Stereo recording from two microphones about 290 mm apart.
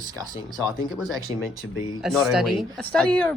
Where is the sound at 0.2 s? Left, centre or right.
Centre.